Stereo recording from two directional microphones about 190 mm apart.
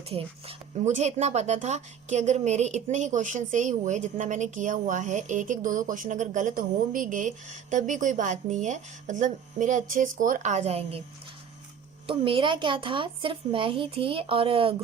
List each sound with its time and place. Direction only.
0.1 s speech: 30° right (ahead or behind)
12.0 s a woman's voice: 25° right (ahead or behind)